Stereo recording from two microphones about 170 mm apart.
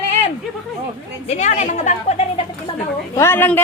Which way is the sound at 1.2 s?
45° left (ahead or behind).